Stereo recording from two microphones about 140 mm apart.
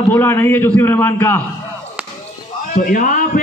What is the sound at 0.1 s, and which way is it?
A man's voice, 15° left (ahead or behind).